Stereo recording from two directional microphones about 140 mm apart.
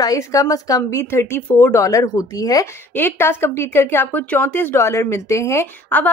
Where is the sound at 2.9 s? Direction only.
15° left (ahead or behind).